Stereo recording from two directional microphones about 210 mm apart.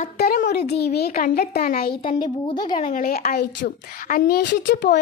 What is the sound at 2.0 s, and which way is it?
Speech, 25° left (ahead or behind).